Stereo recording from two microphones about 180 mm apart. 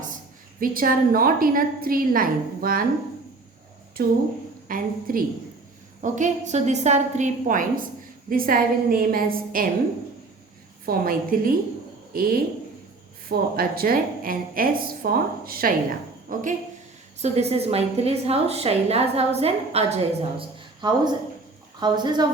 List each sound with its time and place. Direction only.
0.6 s a woman's voice: 50° right (ahead or behind)
4.0 s a woman's voice: 55° right (ahead or behind)
10.8 s a woman's voice: 50° right (ahead or behind)
17.2 s a woman's voice: 35° right (ahead or behind)
20.4 s a woman's voice: 25° right (ahead or behind)